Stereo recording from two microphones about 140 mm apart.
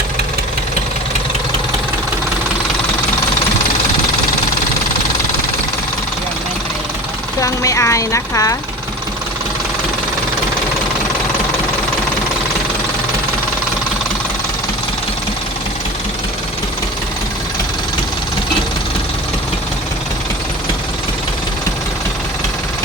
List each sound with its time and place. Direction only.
7.3 s speech: 25° left (ahead or behind)